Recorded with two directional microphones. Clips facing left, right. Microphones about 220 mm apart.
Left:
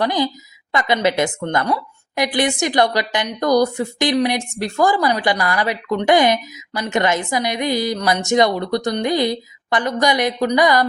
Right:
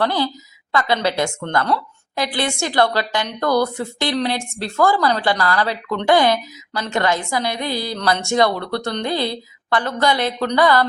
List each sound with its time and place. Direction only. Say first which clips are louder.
0.0 s a woman's voice: left 1 dB; 15° left (ahead or behind)